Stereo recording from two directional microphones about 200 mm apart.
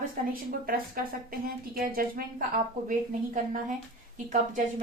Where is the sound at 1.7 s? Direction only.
45° right (ahead or behind).